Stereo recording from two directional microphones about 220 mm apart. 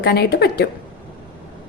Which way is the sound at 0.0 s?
45° left (ahead or behind).